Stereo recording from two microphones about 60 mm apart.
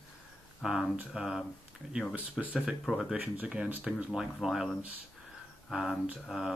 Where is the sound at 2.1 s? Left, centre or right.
Right.